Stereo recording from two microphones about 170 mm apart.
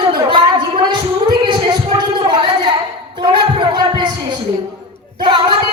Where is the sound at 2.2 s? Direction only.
30° right (ahead or behind).